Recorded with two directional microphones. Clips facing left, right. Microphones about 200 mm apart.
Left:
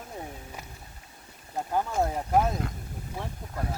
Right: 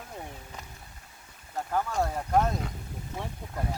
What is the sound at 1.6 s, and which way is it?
Speech, 20° left (ahead or behind).